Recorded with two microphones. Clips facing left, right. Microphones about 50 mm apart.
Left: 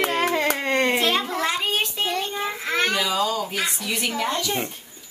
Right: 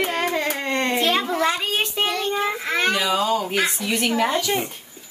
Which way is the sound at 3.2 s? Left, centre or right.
Right.